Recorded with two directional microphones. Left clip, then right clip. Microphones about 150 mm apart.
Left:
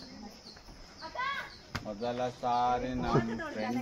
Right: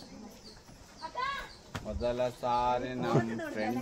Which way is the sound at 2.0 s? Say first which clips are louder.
Right 3 dB; 35° right (ahead or behind).